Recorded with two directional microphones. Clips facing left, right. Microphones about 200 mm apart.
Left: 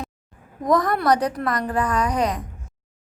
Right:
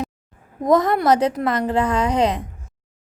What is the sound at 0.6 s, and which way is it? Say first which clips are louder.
A woman's voice: right 3 dB; 25° right (ahead or behind).